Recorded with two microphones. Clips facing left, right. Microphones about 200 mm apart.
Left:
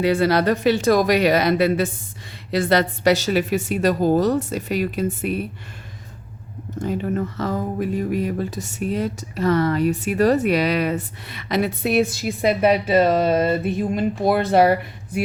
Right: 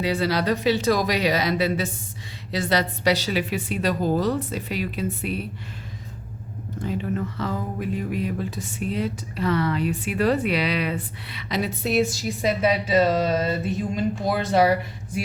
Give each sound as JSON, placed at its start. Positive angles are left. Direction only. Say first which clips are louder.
{"t": 0.0, "sound": "speech", "louder": "left 6 dB", "side_deg": 55}
{"t": 6.7, "sound": "speech", "louder": "left 4 dB", "side_deg": 45}